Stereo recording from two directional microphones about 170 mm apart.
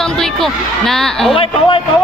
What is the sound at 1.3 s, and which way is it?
Speech, 30° left (ahead or behind).